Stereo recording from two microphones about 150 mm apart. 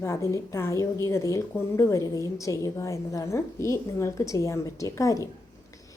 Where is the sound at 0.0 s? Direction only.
20° left (ahead or behind).